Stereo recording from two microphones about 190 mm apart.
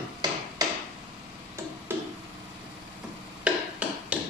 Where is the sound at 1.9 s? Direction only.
10° right (ahead or behind).